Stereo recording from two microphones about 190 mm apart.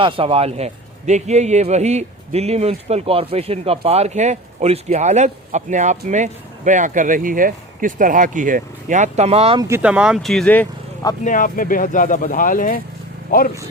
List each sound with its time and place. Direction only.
0.0 s a man's voice: 30° right (ahead or behind)
9.6 s speech: 15° right (ahead or behind); by 10.7 s 5° left (ahead or behind)
11.2 s speech: 45° left (ahead or behind)